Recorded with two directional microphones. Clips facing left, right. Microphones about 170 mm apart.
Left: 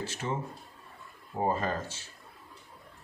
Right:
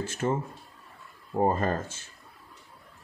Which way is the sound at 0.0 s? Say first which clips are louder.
Right 6 dB; 50° right (ahead or behind).